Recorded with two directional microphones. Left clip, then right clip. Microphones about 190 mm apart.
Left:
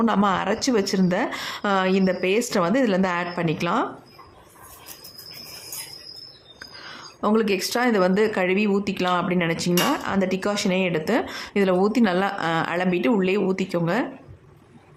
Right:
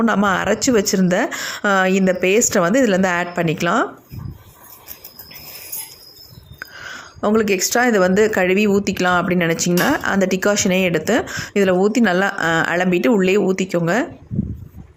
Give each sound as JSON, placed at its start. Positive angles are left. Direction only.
{"t": 0.0, "sound": "speech", "side_deg": -20}
{"t": 6.6, "sound": "speech", "side_deg": -20}